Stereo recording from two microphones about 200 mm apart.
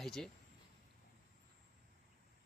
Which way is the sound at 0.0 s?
Centre (ahead or behind).